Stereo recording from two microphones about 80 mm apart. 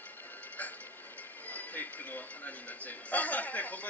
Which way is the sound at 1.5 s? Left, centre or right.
Left.